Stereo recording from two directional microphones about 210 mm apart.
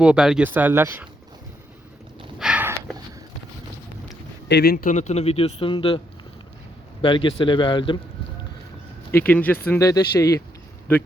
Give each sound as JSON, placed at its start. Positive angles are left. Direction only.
{"t": 0.0, "sound": "speech", "side_deg": -5}
{"t": 2.4, "sound": "a sound", "side_deg": -5}
{"t": 4.4, "sound": "a man's voice", "side_deg": 50}
{"t": 7.0, "sound": "a man's voice", "side_deg": 25}
{"t": 9.1, "sound": "speech", "side_deg": 10}